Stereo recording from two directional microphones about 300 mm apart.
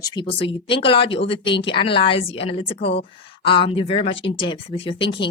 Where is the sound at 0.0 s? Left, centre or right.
Centre.